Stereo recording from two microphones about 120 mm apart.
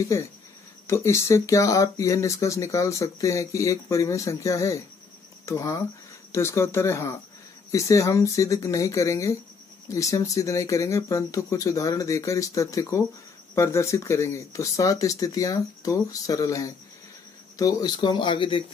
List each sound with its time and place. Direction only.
0.0 s speech: 25° left (ahead or behind); by 18.6 s 45° left (ahead or behind)